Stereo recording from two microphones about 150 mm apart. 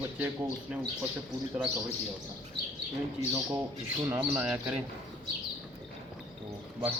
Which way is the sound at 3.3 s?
15° right (ahead or behind).